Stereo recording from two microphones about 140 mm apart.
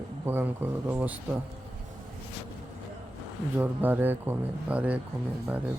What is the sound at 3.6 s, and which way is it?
Speech, 15° right (ahead or behind).